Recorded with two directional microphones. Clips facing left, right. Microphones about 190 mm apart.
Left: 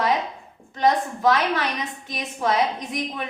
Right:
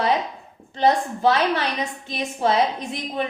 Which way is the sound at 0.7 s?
30° right (ahead or behind).